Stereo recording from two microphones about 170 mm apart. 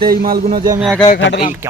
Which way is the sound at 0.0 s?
60° right (ahead or behind).